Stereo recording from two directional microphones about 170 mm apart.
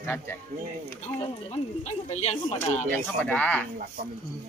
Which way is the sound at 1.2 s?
40° left (ahead or behind).